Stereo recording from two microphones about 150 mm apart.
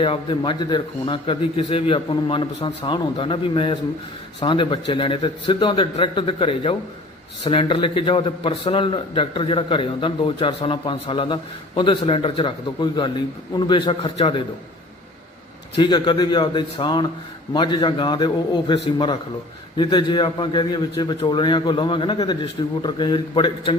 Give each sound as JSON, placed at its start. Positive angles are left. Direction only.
{"t": 0.0, "sound": "a man's voice", "side_deg": 35}
{"t": 15.7, "sound": "a man's voice", "side_deg": 30}